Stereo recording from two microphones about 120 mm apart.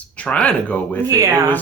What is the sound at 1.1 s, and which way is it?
Speech, 30° right (ahead or behind).